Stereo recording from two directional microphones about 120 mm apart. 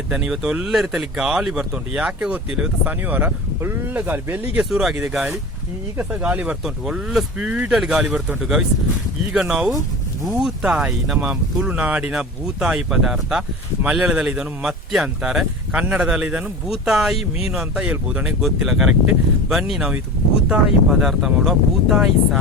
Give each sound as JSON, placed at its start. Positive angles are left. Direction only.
{"t": 0.1, "sound": "speech", "side_deg": -5}
{"t": 4.7, "sound": "speech", "side_deg": 0}
{"t": 6.0, "sound": "speech", "side_deg": -15}
{"t": 17.2, "sound": "speech", "side_deg": 55}
{"t": 17.5, "sound": "speech", "side_deg": -5}